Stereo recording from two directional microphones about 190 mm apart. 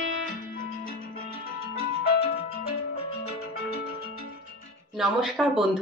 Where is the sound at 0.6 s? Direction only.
45° left (ahead or behind).